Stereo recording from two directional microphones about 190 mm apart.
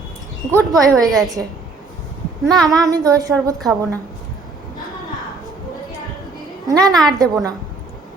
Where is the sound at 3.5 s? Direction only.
Centre (ahead or behind).